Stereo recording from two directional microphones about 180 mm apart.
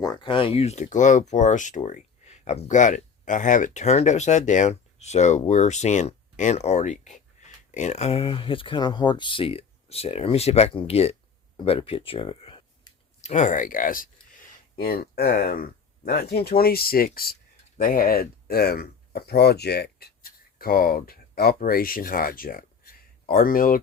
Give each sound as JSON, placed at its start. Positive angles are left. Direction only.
{"t": 0.0, "sound": "speech", "side_deg": 25}